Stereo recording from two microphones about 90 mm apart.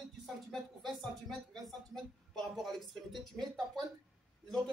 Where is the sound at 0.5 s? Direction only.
5° left (ahead or behind).